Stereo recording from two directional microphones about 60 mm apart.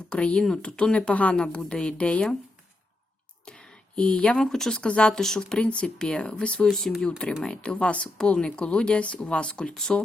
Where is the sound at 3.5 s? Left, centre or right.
Centre.